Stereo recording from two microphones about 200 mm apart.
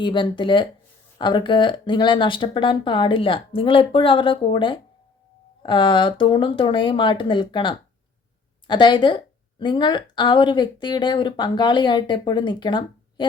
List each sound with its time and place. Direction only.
0.0 s a woman's voice: 25° left (ahead or behind)